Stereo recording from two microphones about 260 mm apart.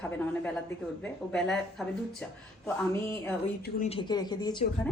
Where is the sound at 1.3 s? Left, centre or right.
Centre.